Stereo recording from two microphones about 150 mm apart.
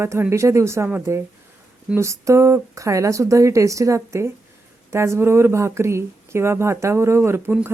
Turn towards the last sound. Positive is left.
turn(degrees=-15)  # may be behind; listen again after turning